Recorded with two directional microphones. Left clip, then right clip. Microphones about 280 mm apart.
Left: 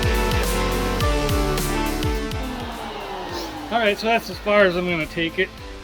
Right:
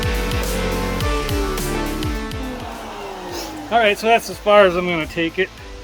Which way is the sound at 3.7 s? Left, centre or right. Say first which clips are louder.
Right 5 dB; centre.